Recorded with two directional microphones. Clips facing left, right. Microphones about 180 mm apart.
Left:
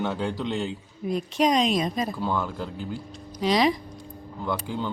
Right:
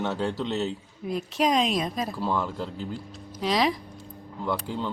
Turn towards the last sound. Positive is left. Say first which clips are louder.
# even
turn(degrees=0)  # may be behind; listen again after turning